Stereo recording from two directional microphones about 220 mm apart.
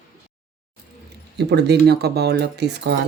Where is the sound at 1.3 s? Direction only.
50° right (ahead or behind).